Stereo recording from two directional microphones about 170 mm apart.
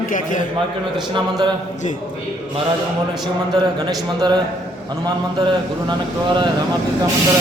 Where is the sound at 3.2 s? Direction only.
25° right (ahead or behind).